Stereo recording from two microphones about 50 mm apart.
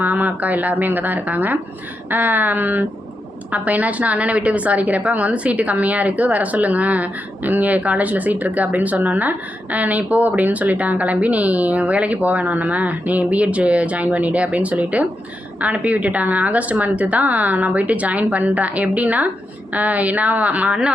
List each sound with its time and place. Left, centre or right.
0.0 s a woman's voice: right